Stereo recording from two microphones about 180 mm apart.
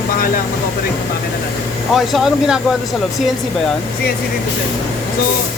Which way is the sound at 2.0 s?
Centre (ahead or behind).